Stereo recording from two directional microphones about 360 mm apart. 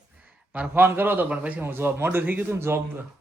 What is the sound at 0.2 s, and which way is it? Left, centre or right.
A man's voice, centre.